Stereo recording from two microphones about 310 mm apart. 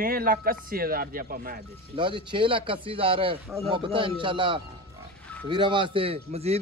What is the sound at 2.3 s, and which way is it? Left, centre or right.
Speech, centre.